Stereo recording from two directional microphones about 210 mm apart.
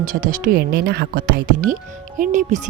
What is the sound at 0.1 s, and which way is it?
Speech, 40° right (ahead or behind).